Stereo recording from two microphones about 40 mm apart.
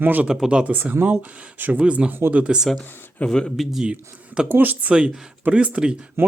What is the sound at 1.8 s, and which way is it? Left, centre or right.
Speech, right.